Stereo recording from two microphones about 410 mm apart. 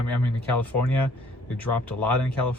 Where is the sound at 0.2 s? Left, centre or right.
Centre.